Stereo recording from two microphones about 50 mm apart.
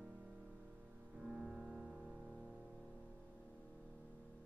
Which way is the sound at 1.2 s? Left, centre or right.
Centre.